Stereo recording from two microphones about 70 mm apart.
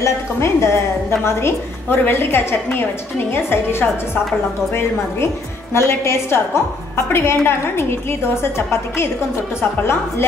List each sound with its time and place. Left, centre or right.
0.0 s a woman's voice: left
4.7 s a woman's voice: left